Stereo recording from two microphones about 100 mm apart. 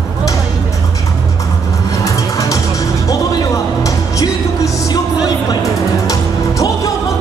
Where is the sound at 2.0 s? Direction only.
35° left (ahead or behind).